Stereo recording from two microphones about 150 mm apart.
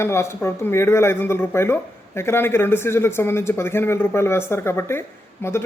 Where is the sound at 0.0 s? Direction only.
15° left (ahead or behind).